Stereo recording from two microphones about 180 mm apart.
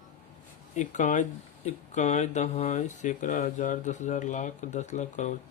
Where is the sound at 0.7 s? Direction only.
45° left (ahead or behind).